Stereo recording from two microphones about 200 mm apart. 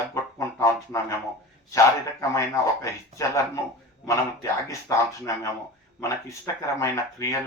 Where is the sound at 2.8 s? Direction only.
15° left (ahead or behind).